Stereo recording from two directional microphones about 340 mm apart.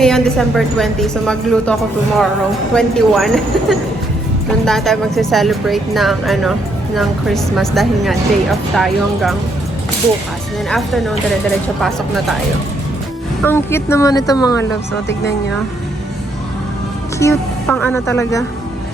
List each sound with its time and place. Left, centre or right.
0.0 s speech: centre
2.7 s speech: centre
10.7 s speech: centre
13.4 s speech: centre
15.0 s speech: left
17.2 s speech: centre